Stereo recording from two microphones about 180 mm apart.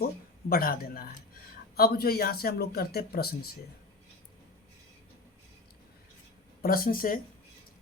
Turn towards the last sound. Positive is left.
turn(degrees=55)  # may be behind; listen again after turning